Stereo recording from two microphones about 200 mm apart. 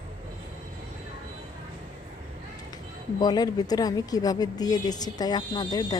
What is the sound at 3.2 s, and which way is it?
Speech, 20° left (ahead or behind).